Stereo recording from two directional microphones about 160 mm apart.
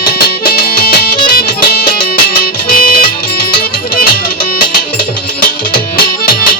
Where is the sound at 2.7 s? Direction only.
65° left (ahead or behind).